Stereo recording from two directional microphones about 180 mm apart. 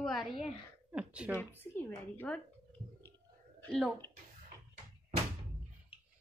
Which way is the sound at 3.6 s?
5° left (ahead or behind).